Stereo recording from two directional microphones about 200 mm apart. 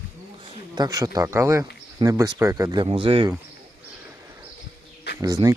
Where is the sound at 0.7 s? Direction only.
20° right (ahead or behind).